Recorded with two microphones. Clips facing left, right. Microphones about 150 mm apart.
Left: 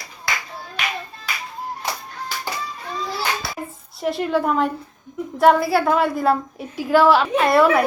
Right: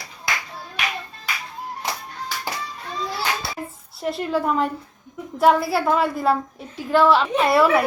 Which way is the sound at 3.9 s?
Centre (ahead or behind).